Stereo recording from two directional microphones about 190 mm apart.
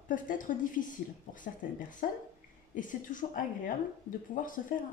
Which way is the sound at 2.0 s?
45° left (ahead or behind).